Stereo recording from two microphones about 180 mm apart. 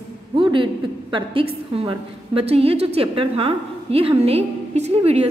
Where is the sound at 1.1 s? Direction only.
30° right (ahead or behind).